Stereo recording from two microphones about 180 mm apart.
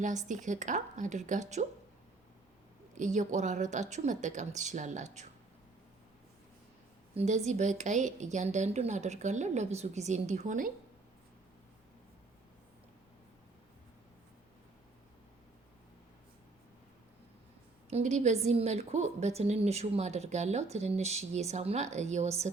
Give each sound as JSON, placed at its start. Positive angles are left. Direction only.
{"t": 0.0, "sound": "a woman's voice", "side_deg": -45}
{"t": 2.9, "sound": "a woman's voice", "side_deg": -45}
{"t": 7.1, "sound": "a woman's voice", "side_deg": -35}
{"t": 17.8, "sound": "a woman's voice", "side_deg": -40}